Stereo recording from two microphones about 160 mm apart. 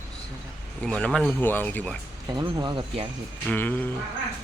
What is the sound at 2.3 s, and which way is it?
Speech, 30° right (ahead or behind).